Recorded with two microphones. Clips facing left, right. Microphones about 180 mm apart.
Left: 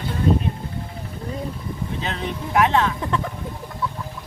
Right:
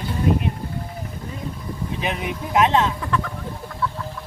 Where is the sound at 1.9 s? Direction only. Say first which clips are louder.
Right 3 dB; 15° right (ahead or behind).